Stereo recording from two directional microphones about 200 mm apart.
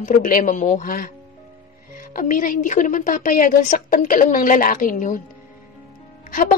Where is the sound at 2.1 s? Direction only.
40° left (ahead or behind).